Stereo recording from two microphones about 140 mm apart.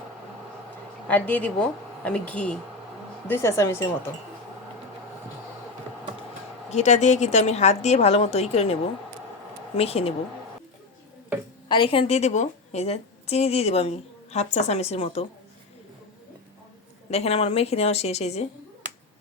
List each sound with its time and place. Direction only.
1.0 s speech: 10° left (ahead or behind)
3.2 s speech: 20° left (ahead or behind)
6.7 s a woman's voice: 55° left (ahead or behind)
11.7 s a woman's voice: 40° left (ahead or behind)
17.1 s a woman's voice: 50° left (ahead or behind)